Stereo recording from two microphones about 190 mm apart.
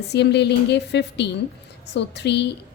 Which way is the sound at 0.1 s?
65° left (ahead or behind).